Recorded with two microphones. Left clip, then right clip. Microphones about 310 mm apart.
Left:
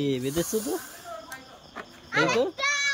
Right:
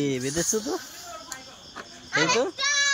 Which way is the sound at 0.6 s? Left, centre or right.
Centre.